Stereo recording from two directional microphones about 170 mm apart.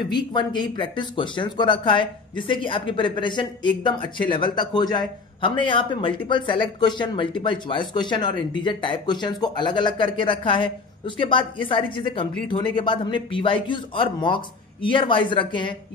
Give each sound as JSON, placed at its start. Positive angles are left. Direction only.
{"t": 0.1, "sound": "speech", "side_deg": 25}